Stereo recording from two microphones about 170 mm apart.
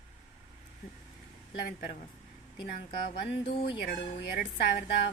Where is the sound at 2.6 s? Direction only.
70° left (ahead or behind).